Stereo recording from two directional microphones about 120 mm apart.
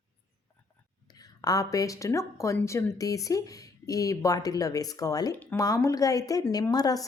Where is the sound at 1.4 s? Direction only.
30° left (ahead or behind).